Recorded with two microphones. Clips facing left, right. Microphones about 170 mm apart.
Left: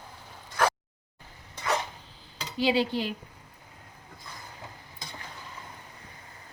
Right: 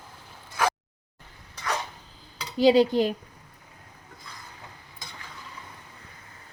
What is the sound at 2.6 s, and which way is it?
Speech, 40° right (ahead or behind).